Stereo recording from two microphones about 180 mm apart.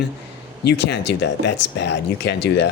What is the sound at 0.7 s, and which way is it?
Speech, 70° left (ahead or behind).